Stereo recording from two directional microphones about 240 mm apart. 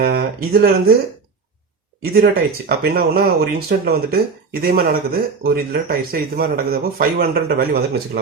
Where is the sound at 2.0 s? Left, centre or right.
Right.